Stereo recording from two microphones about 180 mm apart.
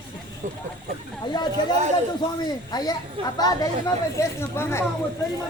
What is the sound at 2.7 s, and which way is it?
Speech, 20° left (ahead or behind).